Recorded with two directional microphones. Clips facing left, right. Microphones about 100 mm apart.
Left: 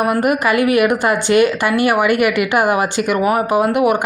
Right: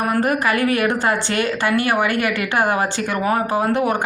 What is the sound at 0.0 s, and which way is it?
A woman's voice, 15° left (ahead or behind).